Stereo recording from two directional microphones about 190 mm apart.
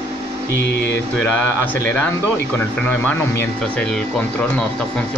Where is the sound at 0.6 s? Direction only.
60° left (ahead or behind).